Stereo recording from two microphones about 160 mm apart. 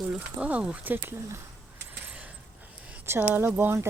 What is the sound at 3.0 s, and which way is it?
Speech, 15° right (ahead or behind).